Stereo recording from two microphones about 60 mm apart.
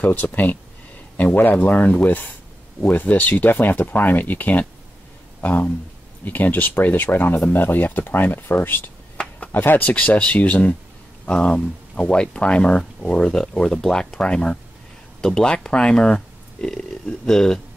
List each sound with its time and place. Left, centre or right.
0.0 s speech: left
9.1 s a sound: left
9.5 s speech: left
11.2 s speech: centre
17.3 s speech: centre